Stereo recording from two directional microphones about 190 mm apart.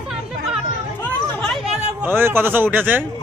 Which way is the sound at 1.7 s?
10° right (ahead or behind).